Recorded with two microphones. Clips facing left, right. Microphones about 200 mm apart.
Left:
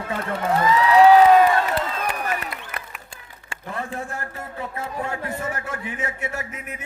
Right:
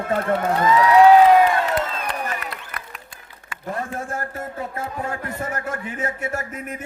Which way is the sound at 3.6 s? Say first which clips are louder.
Right 2 dB; 40° right (ahead or behind).